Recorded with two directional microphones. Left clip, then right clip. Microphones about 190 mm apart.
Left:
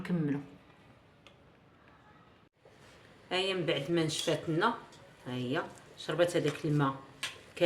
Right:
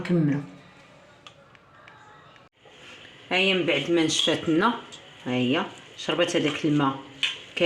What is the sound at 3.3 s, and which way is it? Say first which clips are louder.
Speech: right 9 dB; 40° right (ahead or behind).